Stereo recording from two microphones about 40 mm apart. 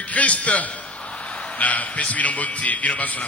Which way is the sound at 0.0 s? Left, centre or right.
Left.